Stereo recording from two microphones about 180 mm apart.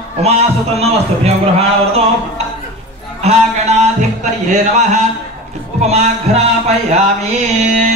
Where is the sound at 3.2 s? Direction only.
40° right (ahead or behind).